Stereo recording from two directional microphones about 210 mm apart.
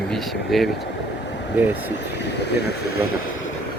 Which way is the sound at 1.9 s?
55° left (ahead or behind).